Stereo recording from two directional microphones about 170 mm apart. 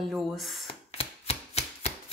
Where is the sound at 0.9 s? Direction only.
35° left (ahead or behind).